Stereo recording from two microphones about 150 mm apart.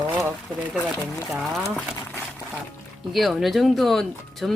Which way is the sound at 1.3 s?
Centre (ahead or behind).